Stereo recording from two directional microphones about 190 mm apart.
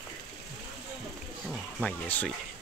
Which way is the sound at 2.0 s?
10° left (ahead or behind).